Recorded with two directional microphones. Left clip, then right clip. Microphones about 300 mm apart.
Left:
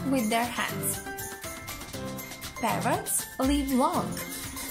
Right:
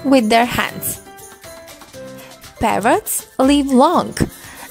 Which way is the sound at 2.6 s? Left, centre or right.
Right.